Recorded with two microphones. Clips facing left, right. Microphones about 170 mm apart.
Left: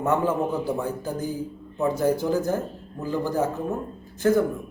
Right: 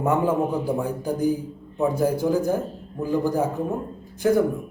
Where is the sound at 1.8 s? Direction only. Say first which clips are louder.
Right 1 dB; 10° right (ahead or behind).